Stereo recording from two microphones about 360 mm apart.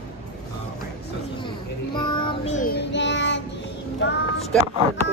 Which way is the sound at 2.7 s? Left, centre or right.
Left.